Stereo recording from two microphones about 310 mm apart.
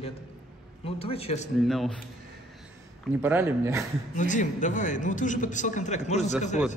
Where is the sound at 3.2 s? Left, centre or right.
Centre.